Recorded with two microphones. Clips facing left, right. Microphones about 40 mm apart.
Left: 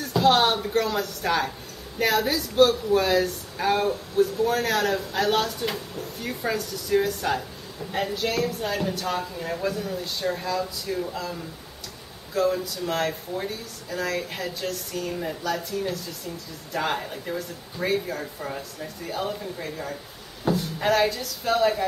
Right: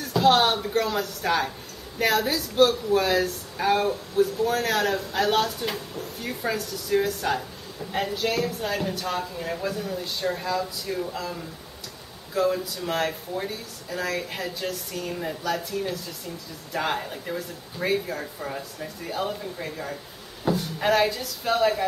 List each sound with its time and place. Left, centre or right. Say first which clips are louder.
0.0 s speech: even; centre
12.4 s speech: even; centre